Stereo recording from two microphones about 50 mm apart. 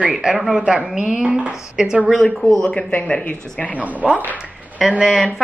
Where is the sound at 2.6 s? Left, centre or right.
Centre.